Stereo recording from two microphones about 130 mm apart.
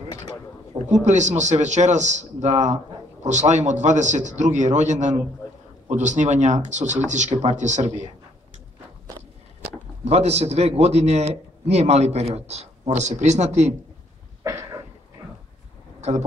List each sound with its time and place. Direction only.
0.1 s a sound: 30° left (ahead or behind)
1.0 s a man's voice: 65° right (ahead or behind)
10.0 s a man's voice: 55° right (ahead or behind)
14.4 s cough: 25° right (ahead or behind)
16.0 s speech: 60° right (ahead or behind)